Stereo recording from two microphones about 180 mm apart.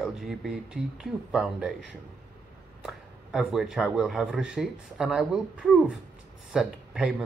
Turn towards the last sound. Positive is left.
turn(degrees=-5)  # may be behind; listen again after turning